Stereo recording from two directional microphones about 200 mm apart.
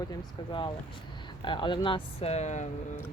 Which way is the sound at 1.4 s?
25° left (ahead or behind).